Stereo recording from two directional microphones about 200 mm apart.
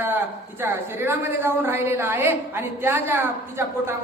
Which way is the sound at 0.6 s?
10° right (ahead or behind).